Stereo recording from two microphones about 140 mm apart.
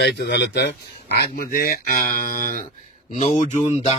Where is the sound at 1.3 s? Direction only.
90° left.